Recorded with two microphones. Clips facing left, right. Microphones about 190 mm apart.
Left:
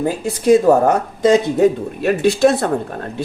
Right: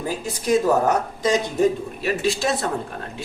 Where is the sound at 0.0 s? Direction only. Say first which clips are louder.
Left 9 dB; 55° left (ahead or behind).